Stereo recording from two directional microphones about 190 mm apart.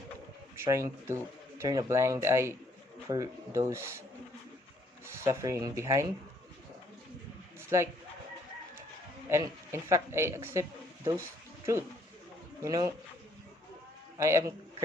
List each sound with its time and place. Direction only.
0.5 s speech: 15° right (ahead or behind)
5.0 s speech: 15° right (ahead or behind)
9.3 s a man's voice: 15° right (ahead or behind)
14.2 s speech: 15° right (ahead or behind)